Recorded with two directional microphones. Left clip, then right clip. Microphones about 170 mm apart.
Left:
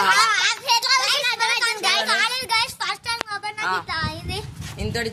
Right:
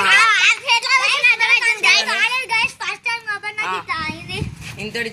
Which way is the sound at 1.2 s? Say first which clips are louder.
Right 8 dB; 45° left (ahead or behind).